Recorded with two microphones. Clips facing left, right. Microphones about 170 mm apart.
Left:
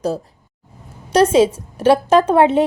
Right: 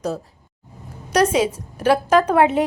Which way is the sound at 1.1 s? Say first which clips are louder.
Left 5 dB; 30° left (ahead or behind).